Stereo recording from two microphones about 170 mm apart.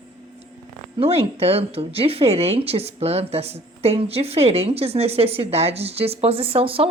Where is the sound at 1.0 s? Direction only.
35° right (ahead or behind).